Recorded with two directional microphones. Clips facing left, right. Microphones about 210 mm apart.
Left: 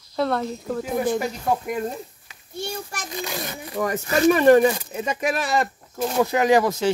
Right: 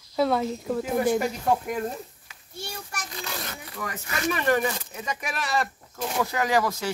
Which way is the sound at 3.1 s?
15° left (ahead or behind).